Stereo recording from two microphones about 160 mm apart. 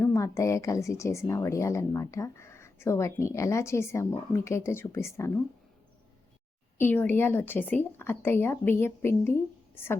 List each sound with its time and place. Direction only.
0.0 s a woman's voice: 20° left (ahead or behind)
6.7 s a woman's voice: 10° left (ahead or behind)